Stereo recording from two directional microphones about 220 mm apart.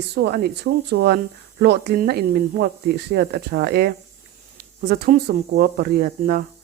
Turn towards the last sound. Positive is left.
turn(degrees=-40)  # may be behind; listen again after turning